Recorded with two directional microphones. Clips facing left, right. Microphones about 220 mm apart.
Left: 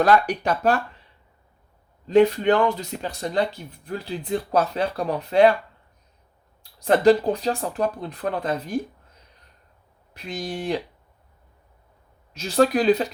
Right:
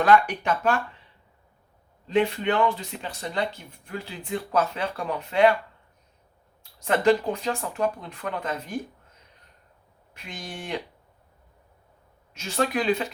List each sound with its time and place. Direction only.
0.0 s speech: 40° left (ahead or behind)
2.0 s speech: 40° left (ahead or behind)
6.6 s speech: 35° left (ahead or behind)
10.2 s speech: 35° left (ahead or behind)
12.3 s speech: 35° left (ahead or behind)